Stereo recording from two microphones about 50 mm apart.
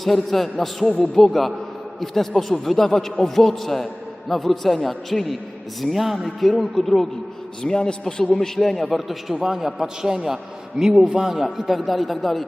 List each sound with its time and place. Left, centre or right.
0.0 s a man's voice: centre
0.9 s a man's voice: centre
1.2 s a man's voice: centre
7.6 s a man's voice: centre